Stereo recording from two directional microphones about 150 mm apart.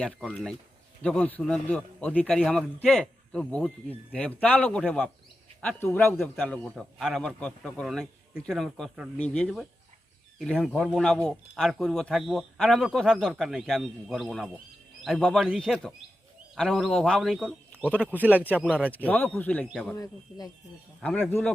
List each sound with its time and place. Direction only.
0.0 s a man's voice: 5° left (ahead or behind)
18.3 s a man's voice: 10° left (ahead or behind)
20.0 s speech: 25° left (ahead or behind)
21.0 s a man's voice: 10° left (ahead or behind)